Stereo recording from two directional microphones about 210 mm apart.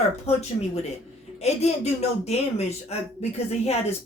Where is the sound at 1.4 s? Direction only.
30° left (ahead or behind).